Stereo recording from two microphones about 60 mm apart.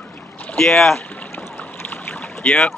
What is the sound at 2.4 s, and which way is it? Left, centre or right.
Speech, centre.